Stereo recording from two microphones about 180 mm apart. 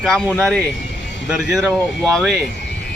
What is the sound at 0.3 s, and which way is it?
Speech, 5° left (ahead or behind).